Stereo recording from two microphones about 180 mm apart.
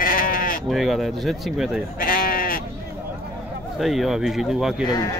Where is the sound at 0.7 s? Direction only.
Centre (ahead or behind).